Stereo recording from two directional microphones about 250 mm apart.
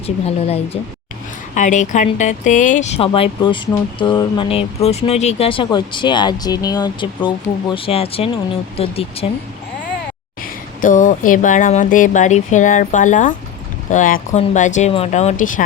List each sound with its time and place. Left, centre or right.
0.3 s speech: left
10.8 s speech: left